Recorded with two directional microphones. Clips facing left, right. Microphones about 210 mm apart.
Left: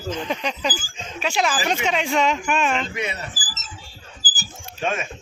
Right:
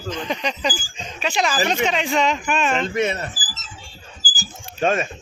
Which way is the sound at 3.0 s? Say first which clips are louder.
Right 7 dB; 45° right (ahead or behind).